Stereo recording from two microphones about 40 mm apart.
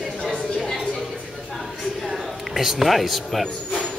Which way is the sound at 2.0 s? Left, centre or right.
Centre.